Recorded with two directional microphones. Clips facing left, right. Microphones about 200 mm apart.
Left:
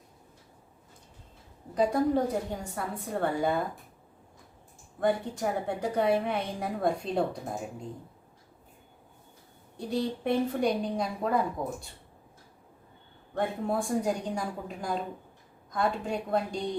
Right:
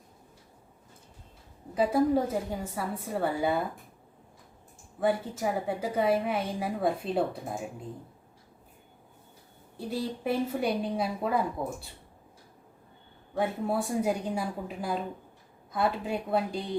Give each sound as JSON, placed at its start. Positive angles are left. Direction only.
{"t": 1.7, "sound": "a woman's voice", "side_deg": -5}
{"t": 4.9, "sound": "a woman's voice", "side_deg": -5}
{"t": 9.7, "sound": "a woman's voice", "side_deg": -5}
{"t": 13.3, "sound": "a woman's voice", "side_deg": -5}